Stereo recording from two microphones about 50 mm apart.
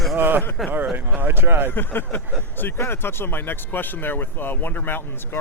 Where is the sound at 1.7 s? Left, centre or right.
Left.